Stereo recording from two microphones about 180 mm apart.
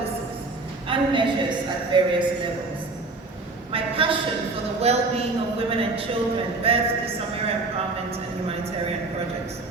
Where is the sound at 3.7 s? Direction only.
30° right (ahead or behind).